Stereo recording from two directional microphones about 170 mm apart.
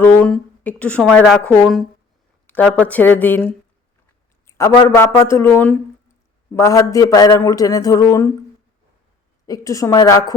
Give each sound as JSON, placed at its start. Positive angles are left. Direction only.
{"t": 0.0, "sound": "a woman's voice", "side_deg": 10}
{"t": 2.5, "sound": "a woman's voice", "side_deg": 10}
{"t": 4.4, "sound": "a sound", "side_deg": 15}
{"t": 4.9, "sound": "a woman's voice", "side_deg": 15}
{"t": 9.5, "sound": "a man's voice", "side_deg": 20}